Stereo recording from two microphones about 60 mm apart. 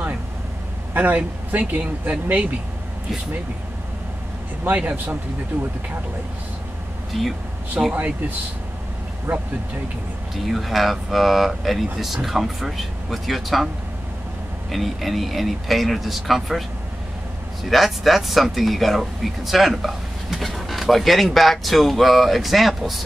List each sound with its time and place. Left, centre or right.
0.9 s speech: right
4.6 s speech: right
7.1 s speech: centre
7.8 s speech: right
9.3 s speech: right
10.3 s speech: centre
14.7 s speech: centre
17.6 s speech: centre